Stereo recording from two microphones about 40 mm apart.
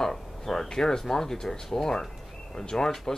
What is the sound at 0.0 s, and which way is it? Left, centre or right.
Speech, centre.